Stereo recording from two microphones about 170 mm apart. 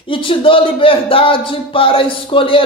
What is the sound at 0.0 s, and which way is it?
Speech, 30° left (ahead or behind).